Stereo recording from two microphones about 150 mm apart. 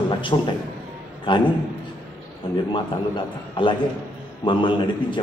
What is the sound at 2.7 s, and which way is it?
A man's voice, 35° left (ahead or behind).